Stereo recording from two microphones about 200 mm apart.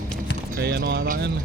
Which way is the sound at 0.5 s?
50° right (ahead or behind).